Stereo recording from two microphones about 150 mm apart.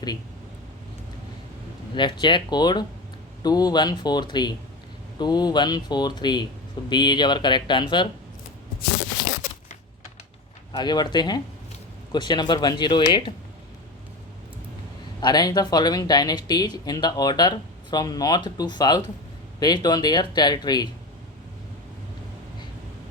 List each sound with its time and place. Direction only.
2.0 s speech: 30° left (ahead or behind)
10.7 s speech: 30° left (ahead or behind)
15.2 s speech: 25° left (ahead or behind)